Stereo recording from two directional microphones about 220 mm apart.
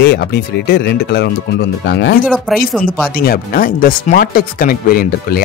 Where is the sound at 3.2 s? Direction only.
40° left (ahead or behind).